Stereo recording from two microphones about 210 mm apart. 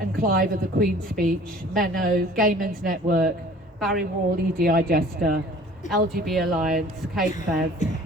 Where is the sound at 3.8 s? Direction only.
Centre (ahead or behind).